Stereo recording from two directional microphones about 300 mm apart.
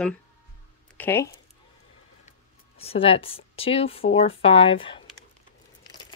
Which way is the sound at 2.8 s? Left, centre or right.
Centre.